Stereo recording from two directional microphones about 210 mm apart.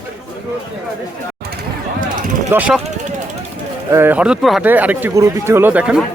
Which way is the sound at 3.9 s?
10° right (ahead or behind).